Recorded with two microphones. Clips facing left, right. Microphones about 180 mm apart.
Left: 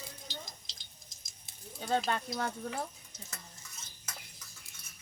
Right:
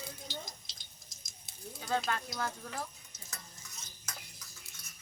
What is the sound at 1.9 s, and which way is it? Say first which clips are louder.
Speech: left 3 dB; 30° left (ahead or behind).